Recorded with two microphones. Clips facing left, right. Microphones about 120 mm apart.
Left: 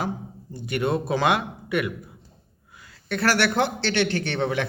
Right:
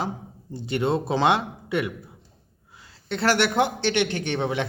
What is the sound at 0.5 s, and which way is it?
A man's voice, 25° right (ahead or behind).